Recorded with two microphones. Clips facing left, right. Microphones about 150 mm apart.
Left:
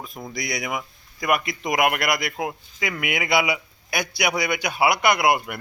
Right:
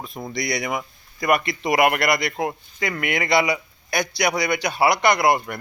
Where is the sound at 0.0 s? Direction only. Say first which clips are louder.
Right 4 dB; centre (ahead or behind).